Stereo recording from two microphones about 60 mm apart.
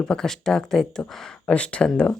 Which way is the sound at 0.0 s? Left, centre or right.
Centre.